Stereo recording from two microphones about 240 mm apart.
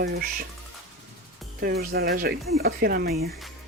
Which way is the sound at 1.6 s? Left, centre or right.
Right.